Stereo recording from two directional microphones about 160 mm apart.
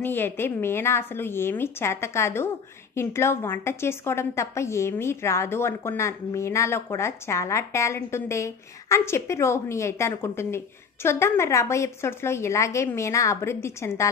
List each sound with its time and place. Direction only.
0.0 s a woman's voice: 15° left (ahead or behind)